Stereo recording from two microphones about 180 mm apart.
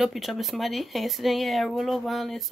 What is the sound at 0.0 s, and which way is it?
Speech, centre (ahead or behind).